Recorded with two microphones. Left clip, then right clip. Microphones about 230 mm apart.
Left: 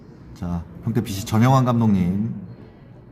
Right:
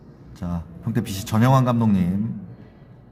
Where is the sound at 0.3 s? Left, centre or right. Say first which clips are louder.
Left 1 dB; centre.